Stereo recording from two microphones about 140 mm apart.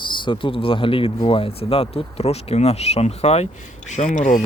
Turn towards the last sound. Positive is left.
turn(degrees=60)  # may be behind; listen again after turning